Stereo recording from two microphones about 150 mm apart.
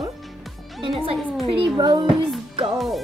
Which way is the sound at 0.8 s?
35° right (ahead or behind).